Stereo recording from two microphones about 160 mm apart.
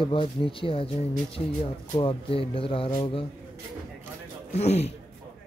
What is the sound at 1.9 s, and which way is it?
Speech, 35° left (ahead or behind).